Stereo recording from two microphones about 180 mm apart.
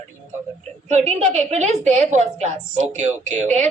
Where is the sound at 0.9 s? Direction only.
40° right (ahead or behind).